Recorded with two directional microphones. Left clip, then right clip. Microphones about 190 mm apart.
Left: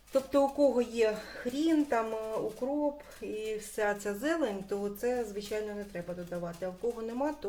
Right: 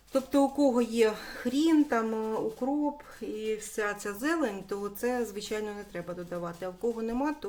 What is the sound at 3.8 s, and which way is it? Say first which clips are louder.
A woman's voice: left 1 dB; 20° right (ahead or behind).